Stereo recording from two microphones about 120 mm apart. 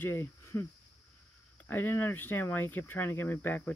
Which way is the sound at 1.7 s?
15° left (ahead or behind).